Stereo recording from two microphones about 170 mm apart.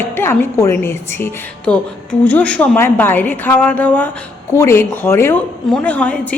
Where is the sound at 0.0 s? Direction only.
15° left (ahead or behind).